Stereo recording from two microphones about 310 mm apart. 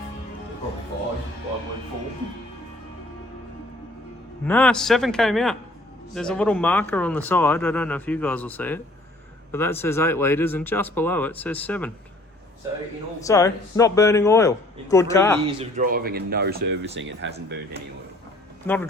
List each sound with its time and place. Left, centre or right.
4.4 s speech: centre
13.2 s speech: centre
15.4 s speech: centre; by 17.2 s right
18.6 s speech: centre